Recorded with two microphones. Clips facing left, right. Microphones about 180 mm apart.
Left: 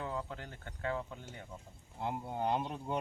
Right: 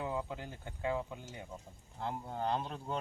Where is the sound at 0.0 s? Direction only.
15° right (ahead or behind).